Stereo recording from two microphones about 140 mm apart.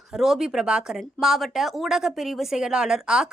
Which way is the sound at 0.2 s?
5° right (ahead or behind).